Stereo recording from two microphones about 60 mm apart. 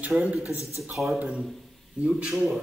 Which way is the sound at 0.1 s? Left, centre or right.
Centre.